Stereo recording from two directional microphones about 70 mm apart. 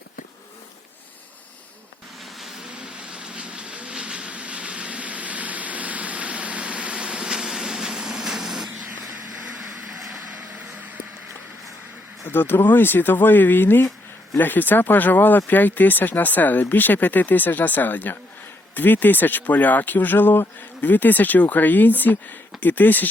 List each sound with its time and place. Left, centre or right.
2.7 s vehicle: centre
12.3 s speech: left